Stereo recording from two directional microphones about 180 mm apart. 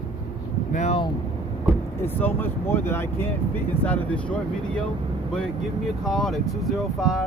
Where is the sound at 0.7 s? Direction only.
40° left (ahead or behind).